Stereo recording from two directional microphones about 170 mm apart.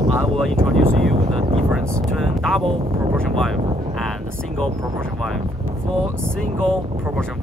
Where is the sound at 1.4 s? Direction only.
35° right (ahead or behind).